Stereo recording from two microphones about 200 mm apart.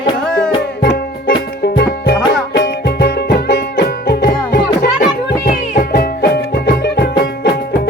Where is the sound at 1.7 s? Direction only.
55° left (ahead or behind).